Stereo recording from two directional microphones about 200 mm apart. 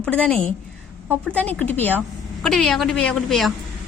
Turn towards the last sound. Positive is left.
turn(degrees=0)  # may be behind; listen again after turning